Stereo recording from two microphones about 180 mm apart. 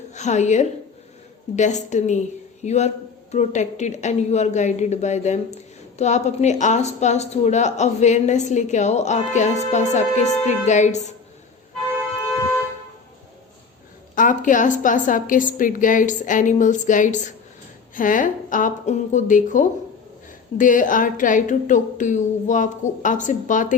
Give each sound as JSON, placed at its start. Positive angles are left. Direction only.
{"t": 0.1, "sound": "a woman's voice", "side_deg": 40}
{"t": 14.2, "sound": "a woman's voice", "side_deg": 45}